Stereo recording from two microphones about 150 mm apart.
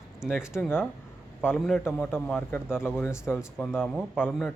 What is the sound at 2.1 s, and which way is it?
Speech, 15° left (ahead or behind).